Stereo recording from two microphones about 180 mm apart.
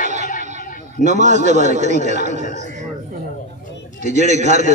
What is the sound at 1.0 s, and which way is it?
A man's voice, 40° right (ahead or behind).